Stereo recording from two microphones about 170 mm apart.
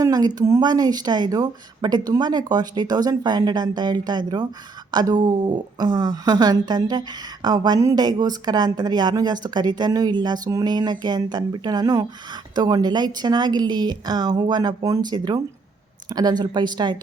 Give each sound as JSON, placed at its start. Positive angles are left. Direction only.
{"t": 0.0, "sound": "speech", "side_deg": -20}